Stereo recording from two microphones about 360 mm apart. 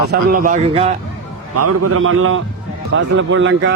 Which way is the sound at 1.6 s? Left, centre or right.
Right.